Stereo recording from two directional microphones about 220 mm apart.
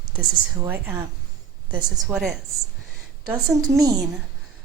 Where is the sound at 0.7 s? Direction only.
10° right (ahead or behind).